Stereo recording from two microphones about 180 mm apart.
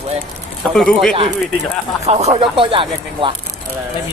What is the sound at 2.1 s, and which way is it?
Speech, 35° right (ahead or behind).